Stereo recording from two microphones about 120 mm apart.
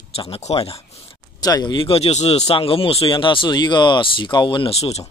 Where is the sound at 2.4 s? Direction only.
50° left (ahead or behind).